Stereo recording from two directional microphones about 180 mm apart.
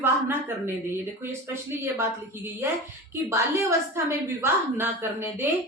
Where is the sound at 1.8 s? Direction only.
15° right (ahead or behind).